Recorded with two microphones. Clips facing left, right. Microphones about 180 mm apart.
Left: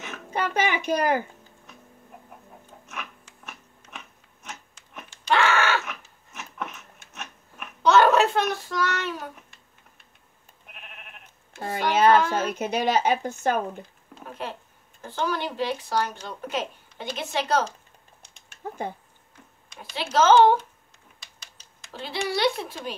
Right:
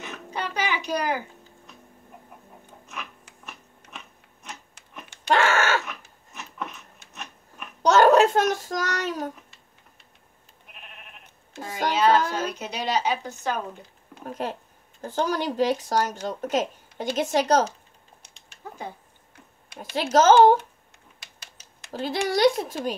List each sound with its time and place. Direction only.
0.3 s a child's voice: 50° left (ahead or behind)
5.1 s groan: 50° right (ahead or behind)
6.3 s a sound: 5° left (ahead or behind)
7.8 s child singing: 45° right (ahead or behind)
11.9 s a woman's voice: 50° left (ahead or behind)
14.2 s speech: 45° right (ahead or behind)
18.6 s speech: 50° left (ahead or behind)
19.8 s speech: 45° right (ahead or behind)
21.2 s typing: 60° right (ahead or behind)
21.9 s speech: 45° right (ahead or behind)